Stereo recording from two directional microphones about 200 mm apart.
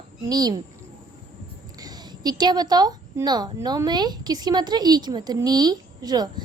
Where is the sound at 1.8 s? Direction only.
20° right (ahead or behind).